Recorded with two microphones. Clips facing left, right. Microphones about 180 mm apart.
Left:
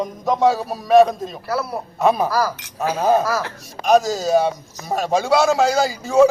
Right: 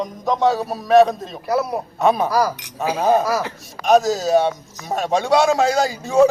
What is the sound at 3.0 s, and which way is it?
Speech, centre (ahead or behind).